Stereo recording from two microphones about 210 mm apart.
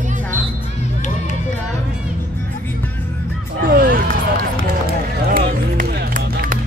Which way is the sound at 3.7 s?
45° right (ahead or behind).